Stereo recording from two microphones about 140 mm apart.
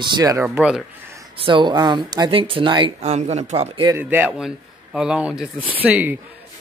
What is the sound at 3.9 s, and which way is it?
Speech, 15° right (ahead or behind).